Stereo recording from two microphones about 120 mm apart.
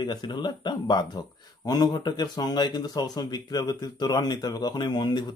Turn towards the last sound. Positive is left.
turn(degrees=35)  # may be behind; listen again after turning